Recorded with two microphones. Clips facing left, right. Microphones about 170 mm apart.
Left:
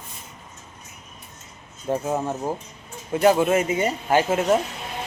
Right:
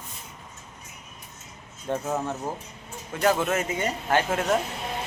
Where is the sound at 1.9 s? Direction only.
15° left (ahead or behind).